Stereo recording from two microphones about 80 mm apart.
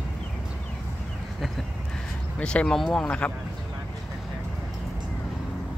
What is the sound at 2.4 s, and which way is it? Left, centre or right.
Speech, centre.